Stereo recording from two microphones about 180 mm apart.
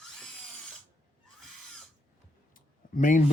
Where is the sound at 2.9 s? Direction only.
45° left (ahead or behind).